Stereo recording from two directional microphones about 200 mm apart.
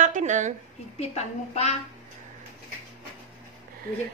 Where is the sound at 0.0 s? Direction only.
40° right (ahead or behind).